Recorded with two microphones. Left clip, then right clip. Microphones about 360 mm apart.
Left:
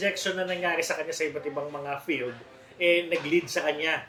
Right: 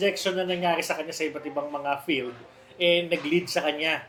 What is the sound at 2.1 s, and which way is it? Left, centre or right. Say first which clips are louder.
Speech: right 2 dB; right.